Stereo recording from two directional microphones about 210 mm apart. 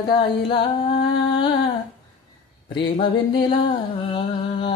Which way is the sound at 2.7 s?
25° left (ahead or behind).